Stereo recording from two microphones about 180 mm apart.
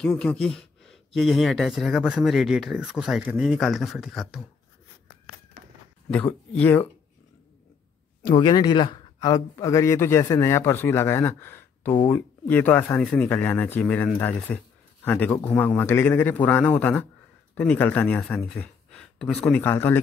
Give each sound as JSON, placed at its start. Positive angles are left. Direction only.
{"t": 0.0, "sound": "speech", "side_deg": 5}
{"t": 6.0, "sound": "a man's voice", "side_deg": 10}
{"t": 8.3, "sound": "a man's voice", "side_deg": 25}